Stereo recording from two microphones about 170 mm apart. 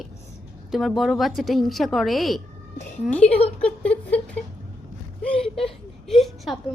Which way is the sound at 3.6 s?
5° left (ahead or behind).